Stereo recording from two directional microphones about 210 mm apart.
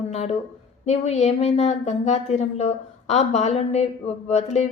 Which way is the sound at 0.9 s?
30° left (ahead or behind).